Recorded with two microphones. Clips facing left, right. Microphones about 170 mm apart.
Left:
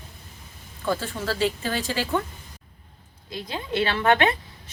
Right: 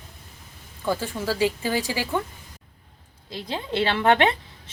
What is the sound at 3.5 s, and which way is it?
Speech, 25° right (ahead or behind).